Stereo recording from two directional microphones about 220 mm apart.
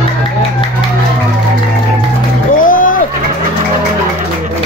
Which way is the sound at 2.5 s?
35° left (ahead or behind).